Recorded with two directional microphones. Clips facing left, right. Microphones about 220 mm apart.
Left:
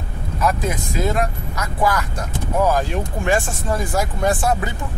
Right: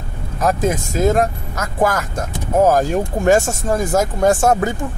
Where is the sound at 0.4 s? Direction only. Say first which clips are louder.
Right 4 dB; 45° right (ahead or behind).